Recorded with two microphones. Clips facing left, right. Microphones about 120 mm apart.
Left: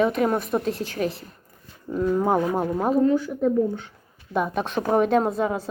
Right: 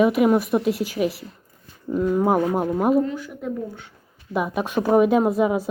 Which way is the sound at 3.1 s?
40° left (ahead or behind).